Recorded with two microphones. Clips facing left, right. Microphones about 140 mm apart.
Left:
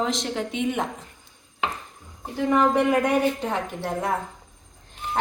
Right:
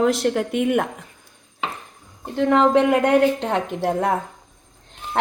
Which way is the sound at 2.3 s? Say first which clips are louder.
Right 4 dB; 70° right (ahead or behind).